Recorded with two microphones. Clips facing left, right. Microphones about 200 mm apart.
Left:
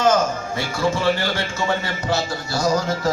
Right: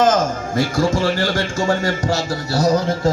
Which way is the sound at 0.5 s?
50° right (ahead or behind).